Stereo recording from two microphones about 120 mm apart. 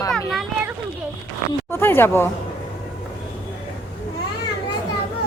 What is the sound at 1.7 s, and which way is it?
Speech, 20° left (ahead or behind).